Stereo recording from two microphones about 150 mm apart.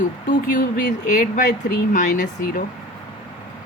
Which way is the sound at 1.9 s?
60° left (ahead or behind).